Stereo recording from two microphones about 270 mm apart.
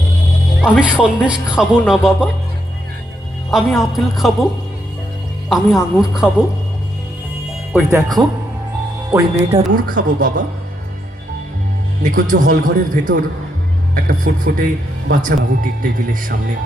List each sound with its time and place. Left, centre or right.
0.6 s speech: centre
3.5 s speech: centre
5.5 s speech: centre
7.7 s speech: centre; by 10.4 s right
12.0 s a man's voice: right